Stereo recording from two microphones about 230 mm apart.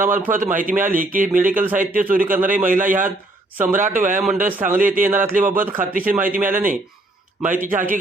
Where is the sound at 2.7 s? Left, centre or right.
Right.